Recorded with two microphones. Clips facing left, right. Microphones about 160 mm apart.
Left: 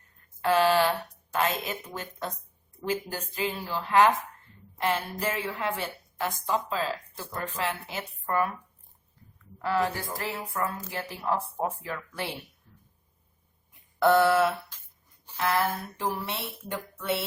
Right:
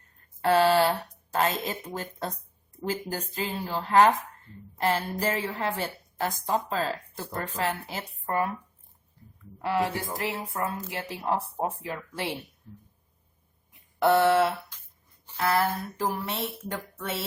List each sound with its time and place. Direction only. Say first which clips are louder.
0.4 s a sound: right 2 dB; 35° right (ahead or behind)
2.8 s a woman's voice: even; 35° right (ahead or behind)
9.6 s speech: even; 20° right (ahead or behind)
14.0 s speech: even; 20° right (ahead or behind)
15.4 s a woman's voice: right 1 dB; 40° right (ahead or behind)